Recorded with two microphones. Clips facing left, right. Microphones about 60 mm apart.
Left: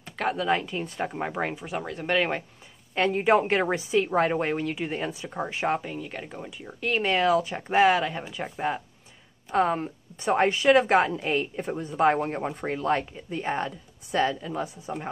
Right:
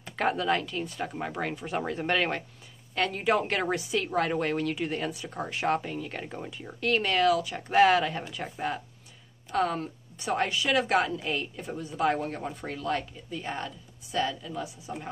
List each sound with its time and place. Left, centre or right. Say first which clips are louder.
0.0 s a sound: even; centre
0.5 s a woman's voice: left 2 dB; centre
1.7 s speech: even; centre
2.9 s a woman's voice: left 5 dB; left
5.8 s a woman's voice: even; centre; by 15.0 s left